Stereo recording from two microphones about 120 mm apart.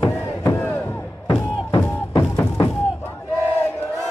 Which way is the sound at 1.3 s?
25° left (ahead or behind).